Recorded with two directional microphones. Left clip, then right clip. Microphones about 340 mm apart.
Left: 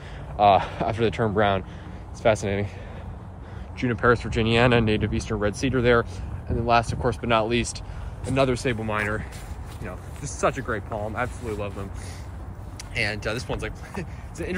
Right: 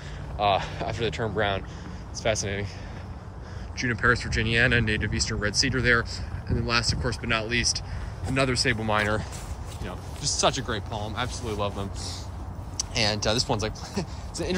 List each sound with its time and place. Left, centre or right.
0.4 s speech: centre
3.7 s speech: centre